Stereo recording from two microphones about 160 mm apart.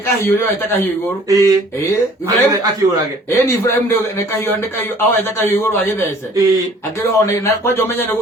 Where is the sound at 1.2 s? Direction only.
20° right (ahead or behind).